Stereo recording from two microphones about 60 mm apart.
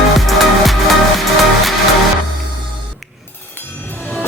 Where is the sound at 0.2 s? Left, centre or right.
Centre.